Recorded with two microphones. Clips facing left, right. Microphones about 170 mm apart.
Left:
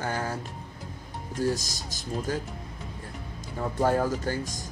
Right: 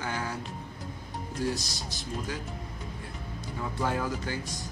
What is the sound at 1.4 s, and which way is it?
Speech, 40° left (ahead or behind).